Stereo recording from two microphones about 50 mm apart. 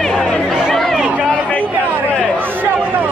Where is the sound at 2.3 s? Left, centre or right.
Right.